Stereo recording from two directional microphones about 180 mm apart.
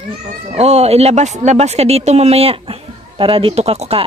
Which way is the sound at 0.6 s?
35° right (ahead or behind).